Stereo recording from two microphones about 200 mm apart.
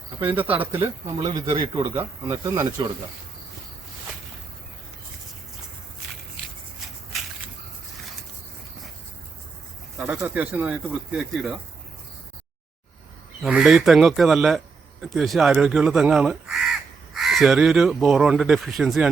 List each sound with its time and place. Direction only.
0.2 s speech: 10° right (ahead or behind)
10.0 s speech: 5° right (ahead or behind)
13.4 s speech: 5° right (ahead or behind)